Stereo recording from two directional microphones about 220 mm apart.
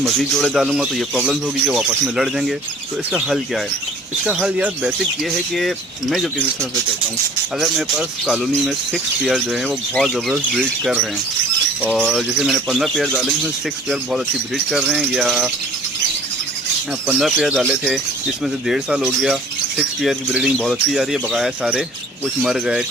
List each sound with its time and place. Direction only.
0.0 s speech: centre (ahead or behind)
17.1 s speech: centre (ahead or behind)